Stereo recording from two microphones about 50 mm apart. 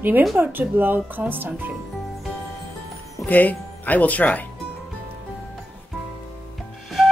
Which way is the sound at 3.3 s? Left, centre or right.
Left.